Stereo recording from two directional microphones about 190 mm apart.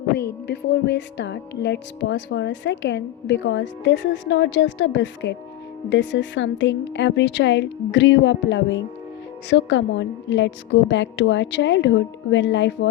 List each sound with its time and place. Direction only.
0.2 s speech: 60° left (ahead or behind)